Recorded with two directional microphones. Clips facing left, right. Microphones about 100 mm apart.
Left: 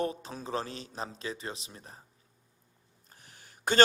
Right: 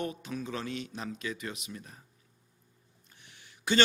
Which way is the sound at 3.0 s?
40° left (ahead or behind).